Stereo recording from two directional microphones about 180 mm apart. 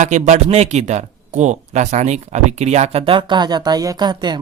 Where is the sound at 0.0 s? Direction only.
40° right (ahead or behind).